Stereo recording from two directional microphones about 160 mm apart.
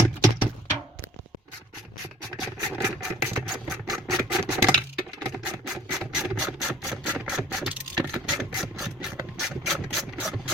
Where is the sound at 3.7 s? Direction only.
Centre (ahead or behind).